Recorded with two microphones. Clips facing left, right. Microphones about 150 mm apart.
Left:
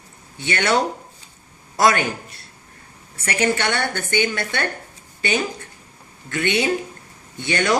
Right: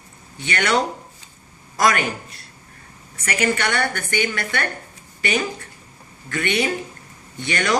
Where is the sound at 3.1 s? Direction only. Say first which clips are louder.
Left 1 dB; 25° left (ahead or behind).